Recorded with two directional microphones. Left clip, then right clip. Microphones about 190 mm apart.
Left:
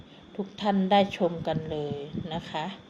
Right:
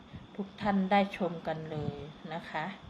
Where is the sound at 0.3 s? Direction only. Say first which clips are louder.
Left 5 dB; 20° left (ahead or behind).